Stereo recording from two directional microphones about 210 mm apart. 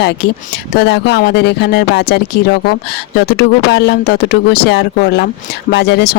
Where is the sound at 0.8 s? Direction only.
55° left (ahead or behind).